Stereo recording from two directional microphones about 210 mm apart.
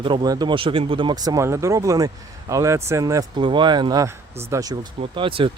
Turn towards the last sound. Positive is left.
turn(degrees=-25)  # may be behind; listen again after turning